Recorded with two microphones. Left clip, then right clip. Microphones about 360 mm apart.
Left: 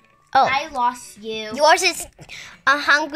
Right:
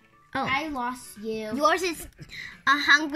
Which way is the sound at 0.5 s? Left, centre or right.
Left.